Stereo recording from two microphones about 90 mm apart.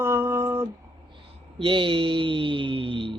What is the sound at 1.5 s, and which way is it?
Speech, 80° right.